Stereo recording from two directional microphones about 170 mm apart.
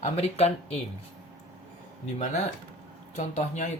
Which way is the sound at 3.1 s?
45° left (ahead or behind).